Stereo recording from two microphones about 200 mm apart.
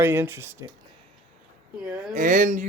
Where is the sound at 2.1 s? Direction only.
40° right (ahead or behind).